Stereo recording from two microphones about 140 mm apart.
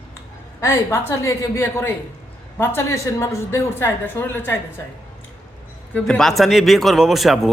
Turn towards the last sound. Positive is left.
turn(degrees=0)  # may be behind; listen again after turning